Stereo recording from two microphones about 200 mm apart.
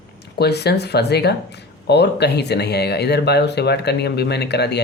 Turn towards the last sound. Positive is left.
turn(degrees=55)  # may be behind; listen again after turning